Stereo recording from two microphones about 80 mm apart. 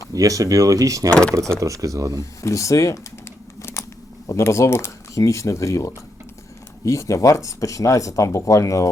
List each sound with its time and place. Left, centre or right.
0.1 s speech: right
1.1 s speech: centre
1.4 s speech: right
2.4 s crumpling: left
4.3 s speech: left